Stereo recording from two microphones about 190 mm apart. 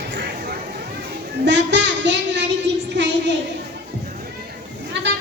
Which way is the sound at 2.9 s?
70° right (ahead or behind).